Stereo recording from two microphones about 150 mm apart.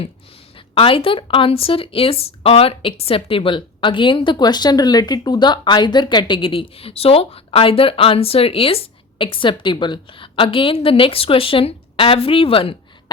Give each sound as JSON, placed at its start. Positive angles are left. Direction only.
{"t": 0.7, "sound": "speech", "side_deg": 35}